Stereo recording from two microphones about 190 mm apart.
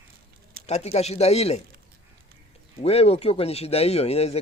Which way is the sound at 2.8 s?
30° left (ahead or behind).